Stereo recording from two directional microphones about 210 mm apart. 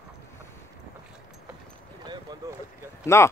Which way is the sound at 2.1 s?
15° right (ahead or behind).